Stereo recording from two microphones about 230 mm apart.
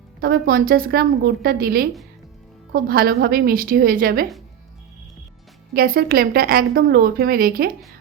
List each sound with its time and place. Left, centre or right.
0.2 s a woman's voice: right
5.7 s a woman's voice: right